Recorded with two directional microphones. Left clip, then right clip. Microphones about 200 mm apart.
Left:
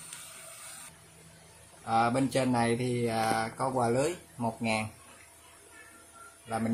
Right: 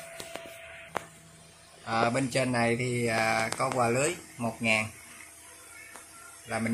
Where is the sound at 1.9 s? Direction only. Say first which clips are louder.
Even; 10° left (ahead or behind).